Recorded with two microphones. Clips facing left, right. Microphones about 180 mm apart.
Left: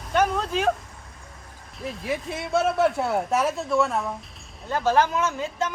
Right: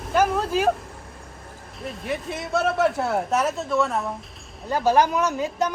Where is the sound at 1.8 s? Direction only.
Centre (ahead or behind).